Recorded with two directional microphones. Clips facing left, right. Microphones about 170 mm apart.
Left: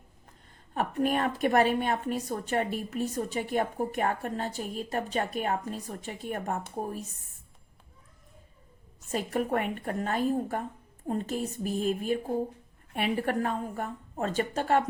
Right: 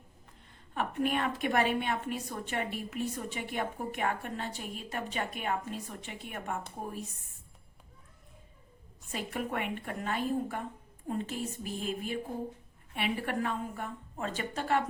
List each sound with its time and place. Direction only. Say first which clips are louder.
0.7 s a woman's voice: left 3 dB; 40° left (ahead or behind)
9.1 s a woman's voice: left 6 dB; 40° left (ahead or behind)